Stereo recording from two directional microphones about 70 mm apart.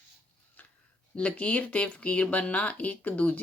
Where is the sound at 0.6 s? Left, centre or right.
Left.